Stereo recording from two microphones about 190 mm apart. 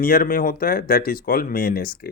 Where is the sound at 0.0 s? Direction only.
50° left (ahead or behind).